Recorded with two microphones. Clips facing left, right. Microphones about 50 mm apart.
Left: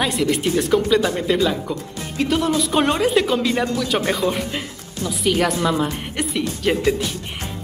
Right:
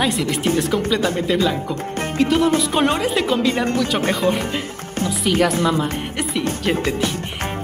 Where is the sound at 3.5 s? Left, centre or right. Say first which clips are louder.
Right 1 dB; right.